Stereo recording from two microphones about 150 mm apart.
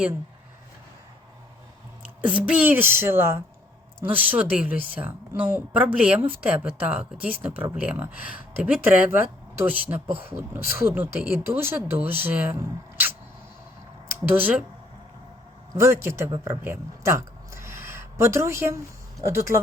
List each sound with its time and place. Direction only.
2.2 s speech: 10° right (ahead or behind)
14.3 s speech: 10° right (ahead or behind)
15.7 s speech: 20° right (ahead or behind)